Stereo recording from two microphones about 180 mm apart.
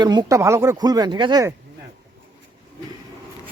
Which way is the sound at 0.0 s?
20° right (ahead or behind).